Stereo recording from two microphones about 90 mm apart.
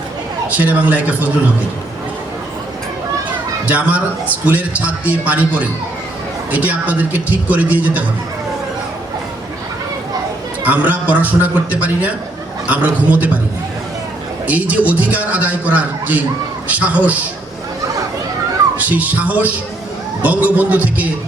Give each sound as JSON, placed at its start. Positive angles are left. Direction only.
{"t": 0.5, "sound": "a man's voice", "side_deg": -20}
{"t": 3.7, "sound": "a man's voice", "side_deg": -15}
{"t": 10.6, "sound": "a man's voice", "side_deg": -15}
{"t": 14.4, "sound": "a man's voice", "side_deg": -15}
{"t": 18.8, "sound": "a man's voice", "side_deg": -20}